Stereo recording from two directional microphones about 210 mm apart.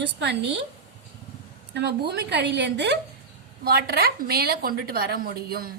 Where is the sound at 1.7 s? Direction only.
55° right (ahead or behind).